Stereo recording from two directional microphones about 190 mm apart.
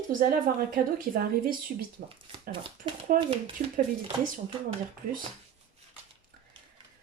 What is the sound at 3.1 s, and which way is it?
Speech, 45° right (ahead or behind).